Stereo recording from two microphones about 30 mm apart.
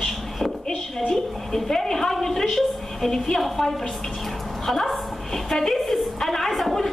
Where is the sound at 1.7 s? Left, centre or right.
Centre.